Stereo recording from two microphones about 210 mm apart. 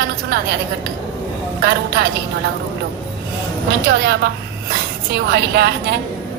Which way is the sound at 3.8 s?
50° right (ahead or behind).